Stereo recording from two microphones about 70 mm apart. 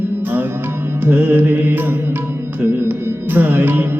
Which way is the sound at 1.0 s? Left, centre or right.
Right.